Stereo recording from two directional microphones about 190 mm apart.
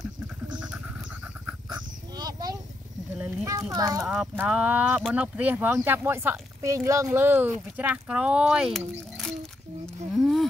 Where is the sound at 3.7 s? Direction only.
15° right (ahead or behind).